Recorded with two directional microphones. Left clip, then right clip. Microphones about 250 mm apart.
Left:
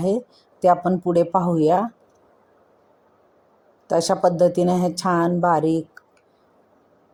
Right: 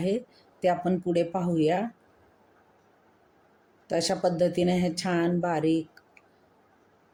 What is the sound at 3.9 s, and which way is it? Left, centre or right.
A woman's voice, centre.